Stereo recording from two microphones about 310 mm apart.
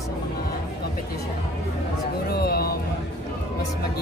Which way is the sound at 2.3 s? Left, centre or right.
Left.